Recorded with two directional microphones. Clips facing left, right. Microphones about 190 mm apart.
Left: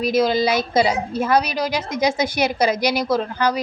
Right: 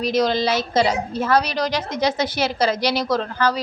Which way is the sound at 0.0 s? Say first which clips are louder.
Left 2 dB; 10° left (ahead or behind).